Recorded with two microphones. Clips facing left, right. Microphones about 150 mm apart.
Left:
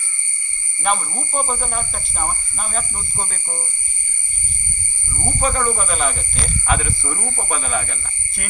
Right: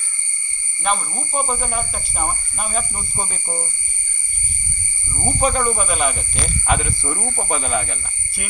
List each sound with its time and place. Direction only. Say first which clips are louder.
0.9 s speech: left 1 dB; centre (ahead or behind)
5.1 s speech: right 2 dB; 15° right (ahead or behind)